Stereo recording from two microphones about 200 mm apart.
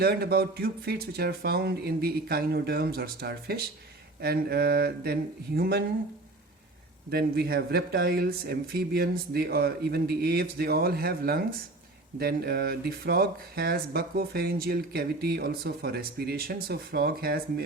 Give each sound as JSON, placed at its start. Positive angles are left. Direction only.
{"t": 0.0, "sound": "speech", "side_deg": -50}
{"t": 7.1, "sound": "speech", "side_deg": -50}